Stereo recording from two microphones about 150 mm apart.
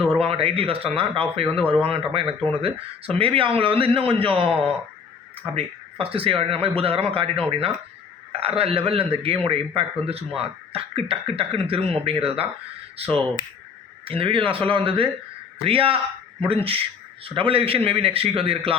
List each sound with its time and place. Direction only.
0.0 s speech: 40° right (ahead or behind)
5.5 s speech: 40° right (ahead or behind)
17.2 s speech: 35° right (ahead or behind)